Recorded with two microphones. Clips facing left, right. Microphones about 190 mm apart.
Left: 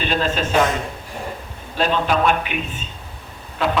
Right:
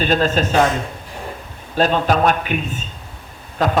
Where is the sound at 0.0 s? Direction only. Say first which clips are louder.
Right 4 dB; 40° right (ahead or behind).